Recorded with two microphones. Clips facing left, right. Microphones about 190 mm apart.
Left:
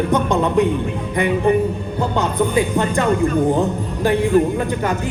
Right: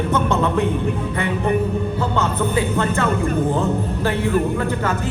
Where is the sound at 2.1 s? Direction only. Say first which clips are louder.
Left 4 dB; 15° left (ahead or behind).